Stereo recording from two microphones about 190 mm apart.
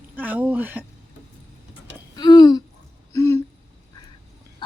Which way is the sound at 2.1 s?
20° left (ahead or behind).